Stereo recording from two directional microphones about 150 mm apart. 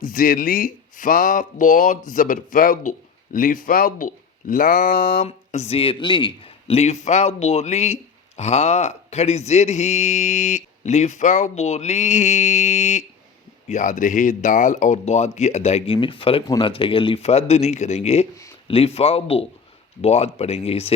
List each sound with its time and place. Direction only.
0.0 s speech: 65° left (ahead or behind)
5.2 s a man's voice: 45° left (ahead or behind)